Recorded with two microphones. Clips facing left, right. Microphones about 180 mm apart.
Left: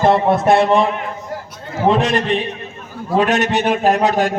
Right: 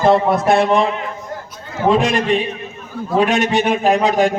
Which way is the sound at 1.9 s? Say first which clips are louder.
Right 4 dB; 10° right (ahead or behind).